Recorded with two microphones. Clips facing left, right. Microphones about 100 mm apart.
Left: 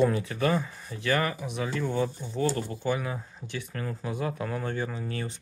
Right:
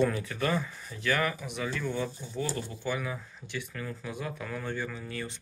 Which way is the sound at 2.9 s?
35° left (ahead or behind).